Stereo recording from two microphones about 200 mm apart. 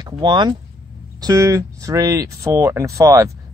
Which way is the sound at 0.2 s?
20° right (ahead or behind).